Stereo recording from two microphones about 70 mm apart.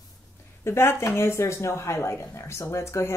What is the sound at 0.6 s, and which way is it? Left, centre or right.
Speech, left.